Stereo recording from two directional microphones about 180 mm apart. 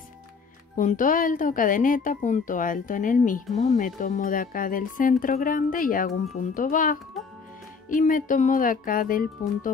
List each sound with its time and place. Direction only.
0.7 s speech: 45° left (ahead or behind)